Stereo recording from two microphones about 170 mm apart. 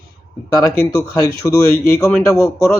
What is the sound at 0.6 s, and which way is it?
Speech, 20° left (ahead or behind).